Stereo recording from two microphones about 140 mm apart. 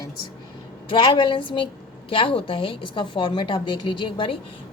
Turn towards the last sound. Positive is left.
turn(degrees=35)  # may be behind; listen again after turning